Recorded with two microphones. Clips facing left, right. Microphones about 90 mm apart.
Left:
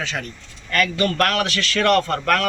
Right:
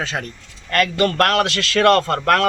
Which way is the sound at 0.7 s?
50° right (ahead or behind).